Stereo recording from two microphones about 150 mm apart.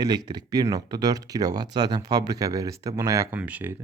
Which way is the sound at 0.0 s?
25° right (ahead or behind).